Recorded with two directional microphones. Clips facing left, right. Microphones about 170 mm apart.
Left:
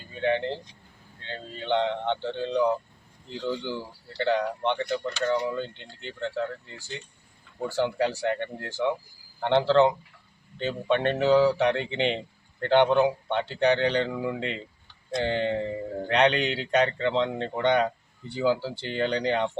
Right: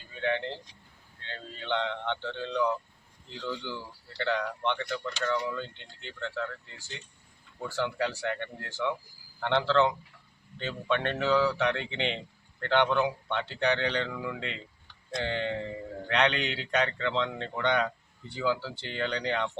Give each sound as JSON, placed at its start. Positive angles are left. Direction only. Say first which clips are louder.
{"t": 0.1, "sound": "speech", "louder": "left 5 dB", "side_deg": 35}
{"t": 7.8, "sound": "speech", "louder": "left 5 dB", "side_deg": 35}